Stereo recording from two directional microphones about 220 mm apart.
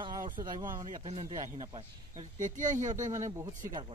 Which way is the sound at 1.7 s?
35° right (ahead or behind).